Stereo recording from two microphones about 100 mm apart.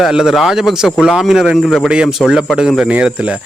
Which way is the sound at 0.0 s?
5° right (ahead or behind).